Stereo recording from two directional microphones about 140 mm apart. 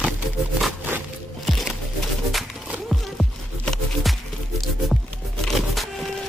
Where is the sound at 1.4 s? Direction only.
Centre (ahead or behind).